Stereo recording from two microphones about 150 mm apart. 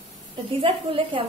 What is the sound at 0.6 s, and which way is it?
Speech, 35° right (ahead or behind).